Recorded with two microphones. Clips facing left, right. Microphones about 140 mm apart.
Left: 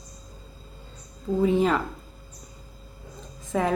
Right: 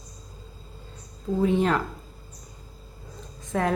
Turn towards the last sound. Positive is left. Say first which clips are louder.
# left 1 dB
turn(degrees=0)  # may be behind; listen again after turning